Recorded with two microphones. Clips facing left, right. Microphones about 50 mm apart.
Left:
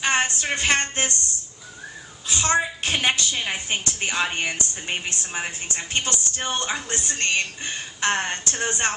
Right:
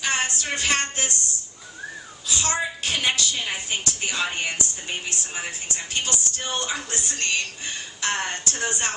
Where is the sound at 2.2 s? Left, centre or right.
Left.